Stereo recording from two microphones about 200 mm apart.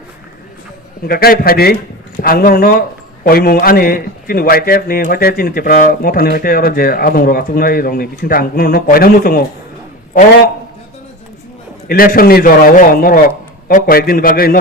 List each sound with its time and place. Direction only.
1.0 s a man's voice: 50° left (ahead or behind)
11.9 s a man's voice: 45° left (ahead or behind)